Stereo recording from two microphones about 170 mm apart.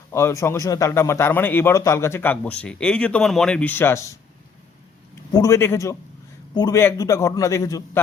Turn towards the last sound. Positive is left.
turn(degrees=20)  # may be behind; listen again after turning